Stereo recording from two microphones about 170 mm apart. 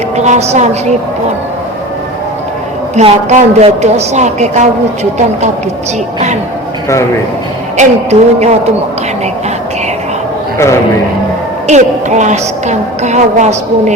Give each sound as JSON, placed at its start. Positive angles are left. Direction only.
{"t": 0.2, "sound": "speech", "side_deg": -40}
{"t": 2.9, "sound": "a woman's voice", "side_deg": -40}
{"t": 7.8, "sound": "speech", "side_deg": -40}
{"t": 11.7, "sound": "a woman's voice", "side_deg": -45}